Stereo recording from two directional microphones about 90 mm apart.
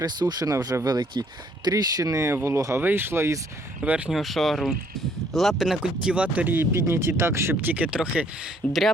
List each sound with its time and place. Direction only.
0.0 s speech: 50° right (ahead or behind); by 3.4 s 30° right (ahead or behind)
3.8 s speech: 15° right (ahead or behind)
4.1 s speech: centre (ahead or behind)
8.6 s speech: 10° left (ahead or behind)